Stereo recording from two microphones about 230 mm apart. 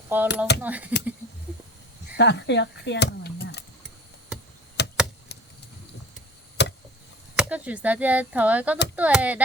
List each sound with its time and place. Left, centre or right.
0.1 s speech: centre
2.1 s speech: left
4.8 s a sound: left
5.3 s chop: left
6.6 s a sound: left
7.3 s speech: centre